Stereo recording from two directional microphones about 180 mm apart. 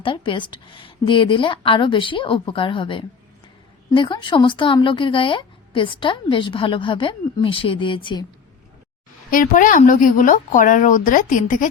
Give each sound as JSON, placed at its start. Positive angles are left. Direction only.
{"t": 0.0, "sound": "speech", "side_deg": 30}
{"t": 9.3, "sound": "a woman's voice", "side_deg": 50}